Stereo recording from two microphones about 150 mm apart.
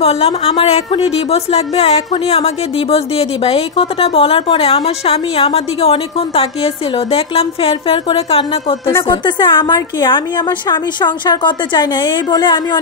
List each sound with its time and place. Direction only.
0.0 s a woman's voice: 40° left (ahead or behind)
8.8 s speech: 15° left (ahead or behind)
9.2 s a woman's voice: 30° left (ahead or behind)